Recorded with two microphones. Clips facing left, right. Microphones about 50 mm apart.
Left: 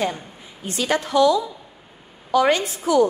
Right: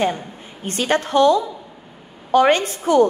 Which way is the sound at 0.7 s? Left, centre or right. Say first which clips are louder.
Right 3 dB; right.